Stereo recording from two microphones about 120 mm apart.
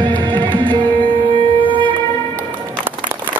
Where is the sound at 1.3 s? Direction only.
45° right (ahead or behind).